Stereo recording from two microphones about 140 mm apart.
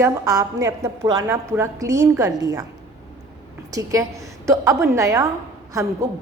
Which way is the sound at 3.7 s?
25° right (ahead or behind).